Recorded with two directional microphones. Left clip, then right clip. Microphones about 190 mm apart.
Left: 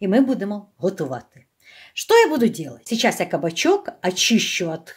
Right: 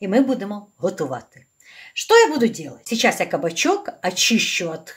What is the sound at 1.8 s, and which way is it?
Speech, 35° left (ahead or behind).